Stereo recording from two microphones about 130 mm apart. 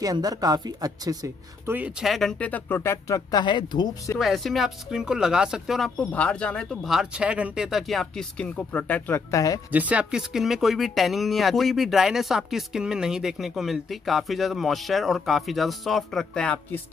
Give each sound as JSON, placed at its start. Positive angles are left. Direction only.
{"t": 0.0, "sound": "a woman's voice", "side_deg": -30}
{"t": 1.7, "sound": "speech", "side_deg": -10}
{"t": 2.0, "sound": "speech", "side_deg": 0}
{"t": 4.2, "sound": "speech", "side_deg": 0}
{"t": 5.9, "sound": "speech", "side_deg": 10}
{"t": 9.7, "sound": "speech", "side_deg": -10}